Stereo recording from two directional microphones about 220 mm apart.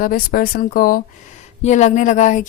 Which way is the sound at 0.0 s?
40° left (ahead or behind).